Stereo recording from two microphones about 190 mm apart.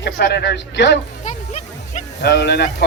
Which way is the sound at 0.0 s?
60° left (ahead or behind).